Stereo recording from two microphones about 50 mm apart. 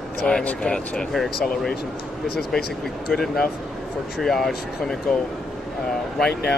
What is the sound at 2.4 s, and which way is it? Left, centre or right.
Speech, centre.